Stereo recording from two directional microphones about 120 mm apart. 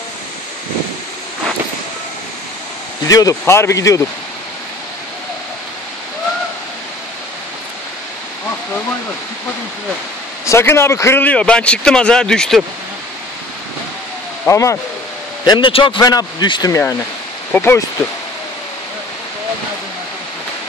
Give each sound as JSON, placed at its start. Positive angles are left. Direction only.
{"t": 3.1, "sound": "speech", "side_deg": 30}
{"t": 10.4, "sound": "a man's voice", "side_deg": 20}
{"t": 14.5, "sound": "speech", "side_deg": 25}
{"t": 15.4, "sound": "a man's voice", "side_deg": 40}
{"t": 16.0, "sound": "a man's voice", "side_deg": 30}
{"t": 17.6, "sound": "speech", "side_deg": 20}